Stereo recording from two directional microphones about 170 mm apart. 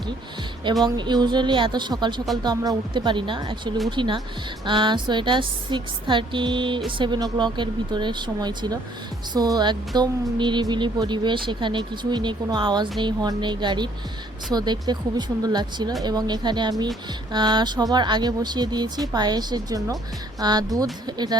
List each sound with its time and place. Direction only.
0.9 s speech: 25° right (ahead or behind)